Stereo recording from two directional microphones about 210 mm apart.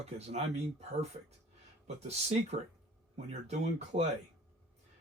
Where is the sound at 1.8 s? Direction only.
30° right (ahead or behind).